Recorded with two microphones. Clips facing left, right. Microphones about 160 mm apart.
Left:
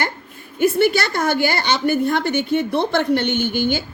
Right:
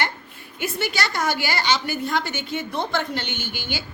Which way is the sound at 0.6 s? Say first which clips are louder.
Left 10 dB; 55° left (ahead or behind).